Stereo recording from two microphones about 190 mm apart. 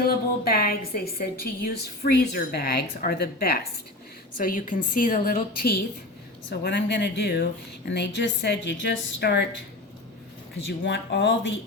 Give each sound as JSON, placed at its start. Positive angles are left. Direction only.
{"t": 0.4, "sound": "a woman's voice", "side_deg": 55}
{"t": 6.5, "sound": "a woman's voice", "side_deg": 60}
{"t": 10.7, "sound": "speech", "side_deg": 65}